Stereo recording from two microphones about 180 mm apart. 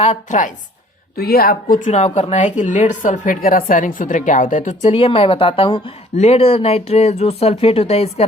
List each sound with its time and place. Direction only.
0.0 s a woman's voice: 40° left (ahead or behind)
1.1 s speech: 60° left (ahead or behind)
1.9 s a woman's voice: 40° left (ahead or behind)